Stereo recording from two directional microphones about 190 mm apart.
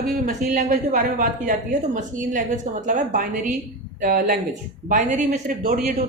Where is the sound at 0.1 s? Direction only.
45° right (ahead or behind).